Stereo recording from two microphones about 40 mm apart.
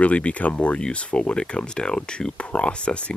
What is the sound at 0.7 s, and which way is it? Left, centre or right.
Speech, left.